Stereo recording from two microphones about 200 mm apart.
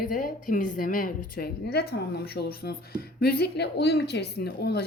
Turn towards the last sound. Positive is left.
turn(degrees=55)  # may be behind; listen again after turning